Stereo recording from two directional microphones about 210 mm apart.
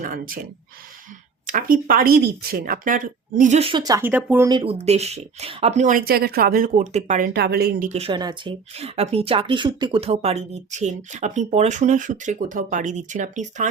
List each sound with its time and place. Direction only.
0.0 s speech: 40° right (ahead or behind)
1.5 s speech: 40° right (ahead or behind); by 4.4 s 10° right (ahead or behind)
4.4 s speech: 25° right (ahead or behind)